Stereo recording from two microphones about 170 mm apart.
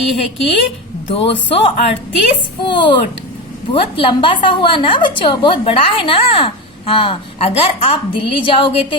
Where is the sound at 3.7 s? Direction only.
30° left (ahead or behind).